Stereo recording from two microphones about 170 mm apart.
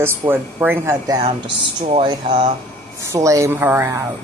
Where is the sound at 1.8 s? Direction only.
35° right (ahead or behind); by 4.0 s 15° right (ahead or behind).